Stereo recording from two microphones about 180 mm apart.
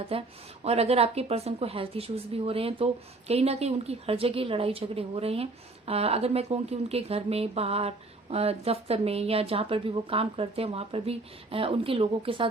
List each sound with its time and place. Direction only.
0.1 s a woman's voice: 35° right (ahead or behind)